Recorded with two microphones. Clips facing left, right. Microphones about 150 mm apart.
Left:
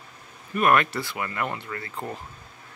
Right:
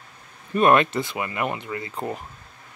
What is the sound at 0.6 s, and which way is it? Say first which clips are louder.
Speech: right 4 dB; 25° right (ahead or behind).